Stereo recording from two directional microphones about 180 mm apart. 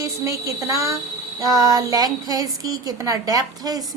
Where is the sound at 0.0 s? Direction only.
15° right (ahead or behind).